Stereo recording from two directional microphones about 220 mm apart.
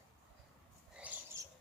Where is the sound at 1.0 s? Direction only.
5° right (ahead or behind).